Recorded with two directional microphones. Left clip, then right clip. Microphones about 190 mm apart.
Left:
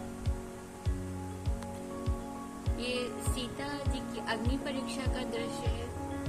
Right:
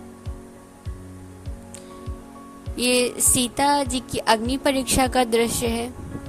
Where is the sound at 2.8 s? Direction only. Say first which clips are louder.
Right 15 dB; 60° right (ahead or behind).